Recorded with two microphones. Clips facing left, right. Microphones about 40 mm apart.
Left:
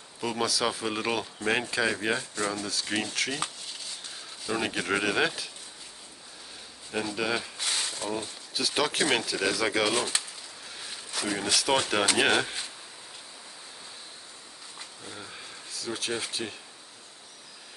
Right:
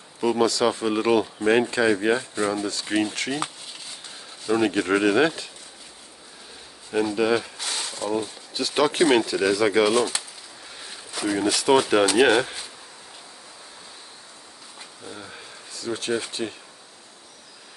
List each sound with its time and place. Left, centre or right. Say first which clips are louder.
0.2 s speech: right 8 dB; centre
2.3 s speech: right 6 dB; centre
2.7 s speech: right 6 dB; centre
7.2 s speech: right 7 dB; centre
7.5 s a sound: right 1 dB; centre
8.5 s speech: right 6 dB; centre
15.0 s a sound: right 4 dB; centre